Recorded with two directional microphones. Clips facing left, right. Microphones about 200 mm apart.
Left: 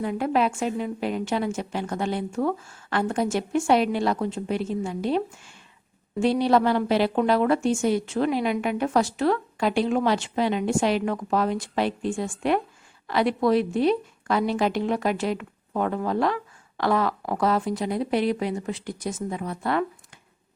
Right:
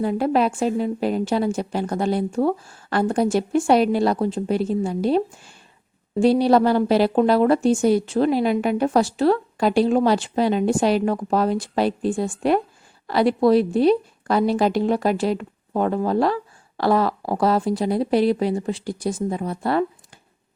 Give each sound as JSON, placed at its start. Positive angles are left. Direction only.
{"t": 0.0, "sound": "a woman's voice", "side_deg": -35}